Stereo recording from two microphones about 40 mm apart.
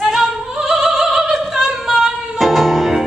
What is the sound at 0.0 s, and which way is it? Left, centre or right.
Opera, centre.